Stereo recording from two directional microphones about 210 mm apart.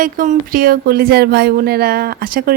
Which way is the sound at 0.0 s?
40° right (ahead or behind).